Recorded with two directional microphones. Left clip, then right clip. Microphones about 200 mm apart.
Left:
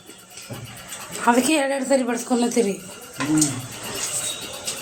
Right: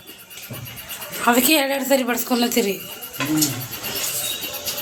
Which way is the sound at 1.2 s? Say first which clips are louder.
Right 1 dB; 10° left (ahead or behind).